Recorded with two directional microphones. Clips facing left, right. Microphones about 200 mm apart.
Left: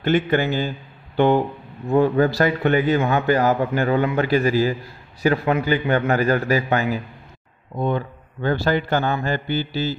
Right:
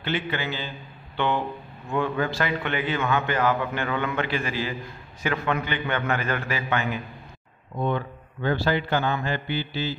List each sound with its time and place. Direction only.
0.0 s a man's voice: 45° left (ahead or behind)